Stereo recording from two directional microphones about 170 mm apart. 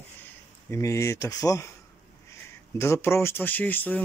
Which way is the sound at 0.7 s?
15° left (ahead or behind).